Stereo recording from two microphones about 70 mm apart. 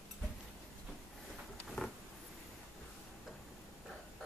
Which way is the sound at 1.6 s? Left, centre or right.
Centre.